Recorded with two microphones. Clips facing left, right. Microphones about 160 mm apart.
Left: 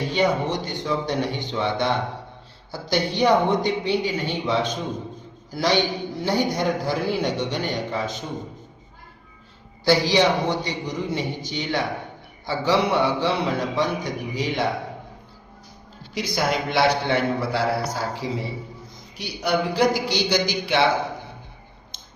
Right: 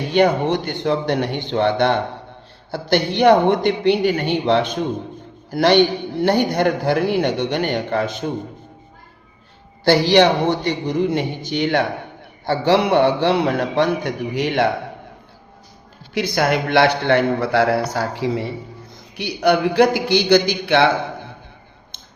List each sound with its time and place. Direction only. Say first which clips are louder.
0.1 s a man's voice: right 7 dB; 65° right (ahead or behind)
9.8 s a man's voice: right 5 dB; 65° right (ahead or behind)
16.1 s a man's voice: right 5 dB; 60° right (ahead or behind)